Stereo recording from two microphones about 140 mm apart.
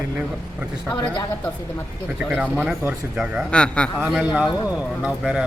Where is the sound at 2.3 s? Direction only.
5° right (ahead or behind).